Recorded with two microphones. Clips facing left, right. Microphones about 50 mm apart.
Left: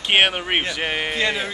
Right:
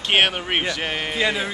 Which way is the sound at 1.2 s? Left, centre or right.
Centre.